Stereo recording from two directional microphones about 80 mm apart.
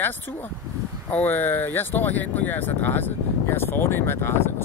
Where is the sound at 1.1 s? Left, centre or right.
Left.